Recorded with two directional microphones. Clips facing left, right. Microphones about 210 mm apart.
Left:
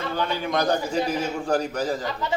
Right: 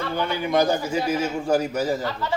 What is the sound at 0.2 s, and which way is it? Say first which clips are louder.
A man's voice: right 4 dB; 10° right (ahead or behind).